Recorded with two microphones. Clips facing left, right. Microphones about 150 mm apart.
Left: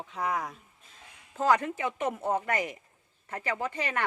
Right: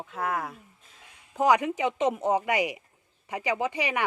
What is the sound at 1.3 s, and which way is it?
Speech, 15° right (ahead or behind).